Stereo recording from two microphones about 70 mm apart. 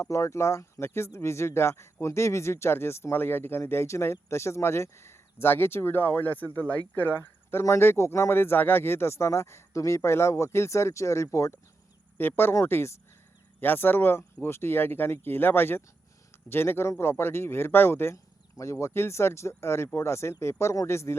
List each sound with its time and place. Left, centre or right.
0.0 s speech: left
12.1 s speech: left